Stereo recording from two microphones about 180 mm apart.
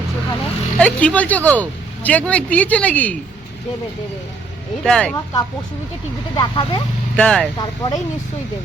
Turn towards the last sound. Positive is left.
turn(degrees=20)  # may be behind; listen again after turning